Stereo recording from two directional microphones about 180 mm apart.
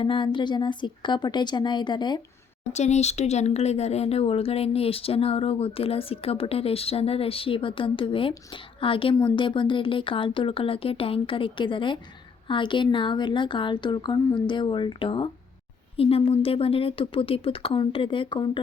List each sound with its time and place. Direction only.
0.0 s a woman's voice: 30° left (ahead or behind)
2.7 s a woman's voice: 40° left (ahead or behind)